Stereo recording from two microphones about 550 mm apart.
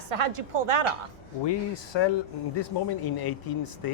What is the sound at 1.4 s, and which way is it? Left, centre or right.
Speech, left.